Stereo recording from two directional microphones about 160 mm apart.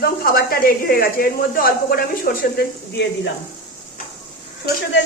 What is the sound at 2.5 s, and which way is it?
Speech, 80° left.